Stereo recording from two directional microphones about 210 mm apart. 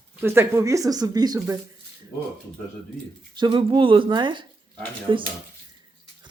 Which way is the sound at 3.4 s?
20° right (ahead or behind).